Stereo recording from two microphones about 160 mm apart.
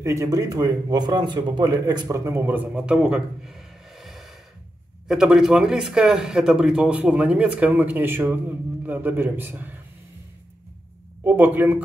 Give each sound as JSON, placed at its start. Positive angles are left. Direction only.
{"t": 0.0, "sound": "speech", "side_deg": -20}
{"t": 11.2, "sound": "speech", "side_deg": -10}